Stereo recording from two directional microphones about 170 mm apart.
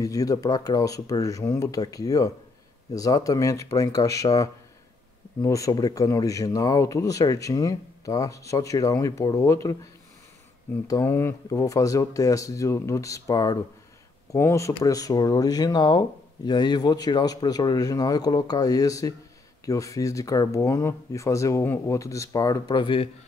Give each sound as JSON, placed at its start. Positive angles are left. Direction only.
{"t": 0.0, "sound": "speech", "side_deg": 20}
{"t": 10.9, "sound": "speech", "side_deg": 15}